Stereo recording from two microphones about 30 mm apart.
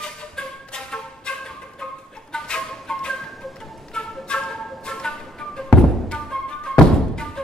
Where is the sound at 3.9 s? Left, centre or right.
Left.